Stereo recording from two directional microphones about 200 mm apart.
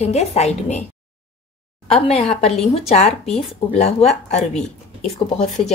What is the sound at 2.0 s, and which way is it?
A woman's voice, 35° left (ahead or behind).